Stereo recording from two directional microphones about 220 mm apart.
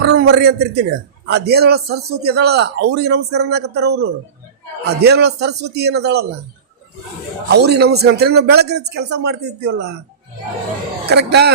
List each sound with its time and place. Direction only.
0.0 s a man's voice: 50° right (ahead or behind)
7.5 s a man's voice: 50° right (ahead or behind)
11.1 s a man's voice: 50° right (ahead or behind)